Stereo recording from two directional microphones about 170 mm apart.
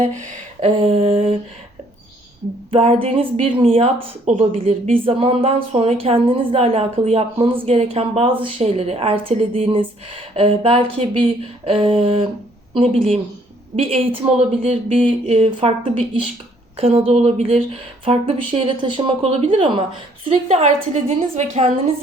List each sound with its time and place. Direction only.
0.0 s a woman's voice: 45° right (ahead or behind)
2.7 s a woman's voice: 35° right (ahead or behind)